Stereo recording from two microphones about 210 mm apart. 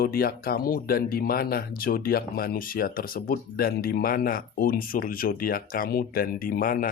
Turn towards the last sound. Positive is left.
turn(degrees=40)  # may be behind; listen again after turning